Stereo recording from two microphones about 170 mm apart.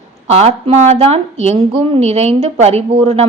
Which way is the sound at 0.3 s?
35° right (ahead or behind).